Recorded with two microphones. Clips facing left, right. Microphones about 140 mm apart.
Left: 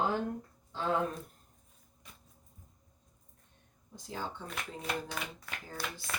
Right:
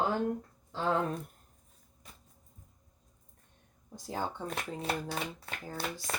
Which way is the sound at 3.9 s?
40° right (ahead or behind).